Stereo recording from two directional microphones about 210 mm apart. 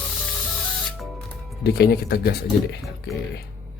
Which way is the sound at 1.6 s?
50° left (ahead or behind).